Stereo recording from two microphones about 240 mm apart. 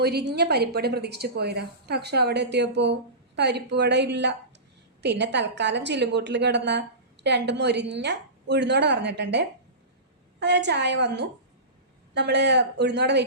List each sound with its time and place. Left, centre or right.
0.0 s a woman's voice: right